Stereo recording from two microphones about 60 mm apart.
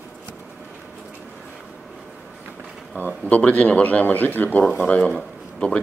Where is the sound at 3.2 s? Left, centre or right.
Left.